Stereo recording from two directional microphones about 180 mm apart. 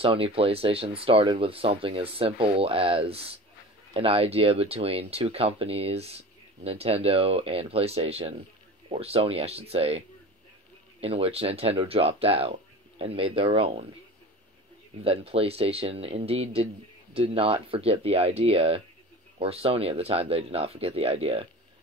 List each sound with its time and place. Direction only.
0.0 s speech: 30° right (ahead or behind)
15.0 s speech: 35° right (ahead or behind)